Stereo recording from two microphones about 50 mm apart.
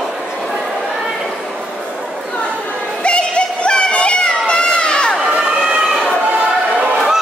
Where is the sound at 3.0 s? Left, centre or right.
Left.